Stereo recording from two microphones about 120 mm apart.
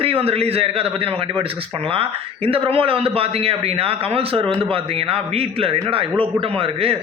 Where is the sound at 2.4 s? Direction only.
50° right (ahead or behind).